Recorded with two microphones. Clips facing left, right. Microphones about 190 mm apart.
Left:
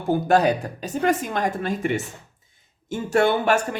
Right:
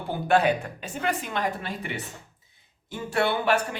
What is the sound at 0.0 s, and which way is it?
Speech, 45° left (ahead or behind).